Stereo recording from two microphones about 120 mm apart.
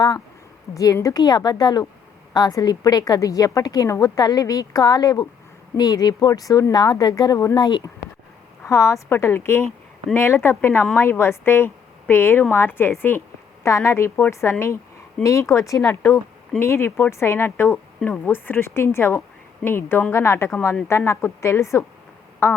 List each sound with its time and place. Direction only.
0.7 s a woman's voice: 30° left (ahead or behind)